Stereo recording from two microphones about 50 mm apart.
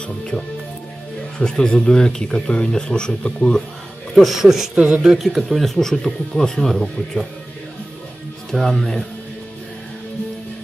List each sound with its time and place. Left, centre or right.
1.4 s speech: centre
4.1 s speech: centre
4.7 s speech: right
5.0 s speech: centre
5.8 s speech: centre
8.5 s speech: centre